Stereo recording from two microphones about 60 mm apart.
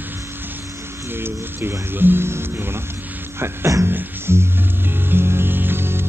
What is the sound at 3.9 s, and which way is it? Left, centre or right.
Music, right.